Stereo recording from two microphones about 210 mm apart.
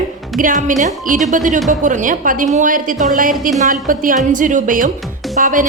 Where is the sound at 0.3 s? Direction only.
40° right (ahead or behind).